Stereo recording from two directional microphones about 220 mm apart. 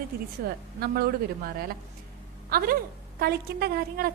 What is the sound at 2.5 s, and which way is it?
A woman's voice, 40° right (ahead or behind).